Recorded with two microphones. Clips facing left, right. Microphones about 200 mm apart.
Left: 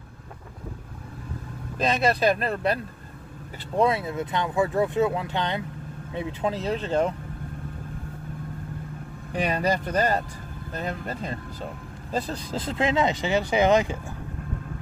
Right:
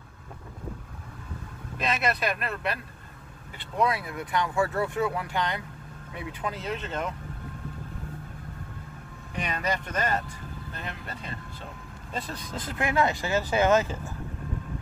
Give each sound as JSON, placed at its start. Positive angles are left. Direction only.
{"t": 1.8, "sound": "speech", "side_deg": 30}
{"t": 9.3, "sound": "speech", "side_deg": 35}